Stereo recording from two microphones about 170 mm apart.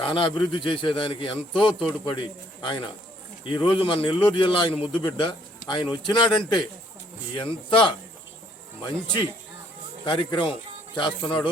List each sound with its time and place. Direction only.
0.0 s a man's voice: 30° left (ahead or behind)
10.1 s a man's voice: 30° left (ahead or behind)